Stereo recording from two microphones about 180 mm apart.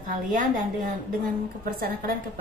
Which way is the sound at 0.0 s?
45° right (ahead or behind).